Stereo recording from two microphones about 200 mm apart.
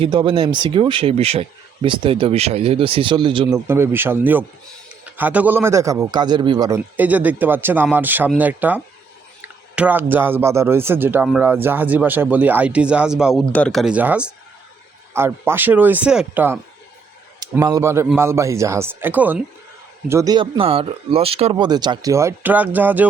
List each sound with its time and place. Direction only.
0.0 s speech: 25° right (ahead or behind)
3.5 s speech: 10° right (ahead or behind)